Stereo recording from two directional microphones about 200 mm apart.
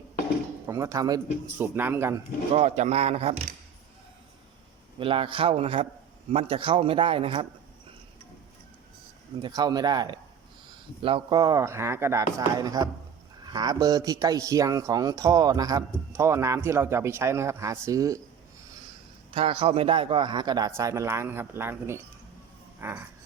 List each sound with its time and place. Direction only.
0.7 s a man's voice: 15° right (ahead or behind)
2.6 s speech: 35° right (ahead or behind)
4.9 s speech: 25° right (ahead or behind)
9.4 s a man's voice: 20° right (ahead or behind)
19.3 s a man's voice: 25° right (ahead or behind); by 23.0 s 10° right (ahead or behind)